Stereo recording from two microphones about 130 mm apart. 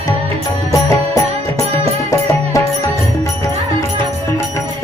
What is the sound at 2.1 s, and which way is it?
Music, 25° left (ahead or behind).